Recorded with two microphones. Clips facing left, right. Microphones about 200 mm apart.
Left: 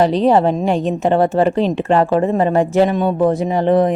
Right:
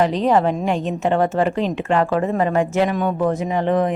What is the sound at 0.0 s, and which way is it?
A woman's voice, 35° left (ahead or behind).